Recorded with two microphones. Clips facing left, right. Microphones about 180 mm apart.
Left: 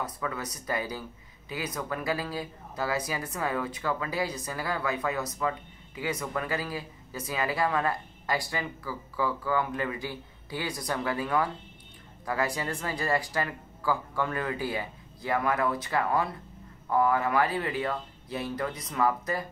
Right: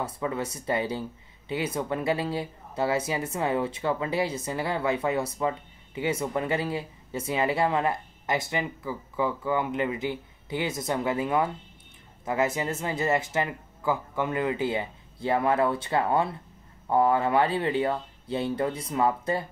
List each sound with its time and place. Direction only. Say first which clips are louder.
0.0 s speech: right 4 dB; 25° right (ahead or behind)